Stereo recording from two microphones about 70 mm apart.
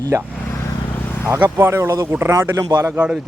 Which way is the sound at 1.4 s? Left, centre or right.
Right.